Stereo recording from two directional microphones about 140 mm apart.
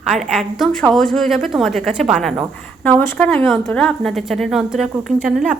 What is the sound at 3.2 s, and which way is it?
A woman's voice, 5° left (ahead or behind).